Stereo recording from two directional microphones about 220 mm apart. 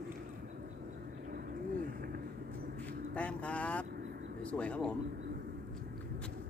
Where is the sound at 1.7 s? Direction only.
40° right (ahead or behind).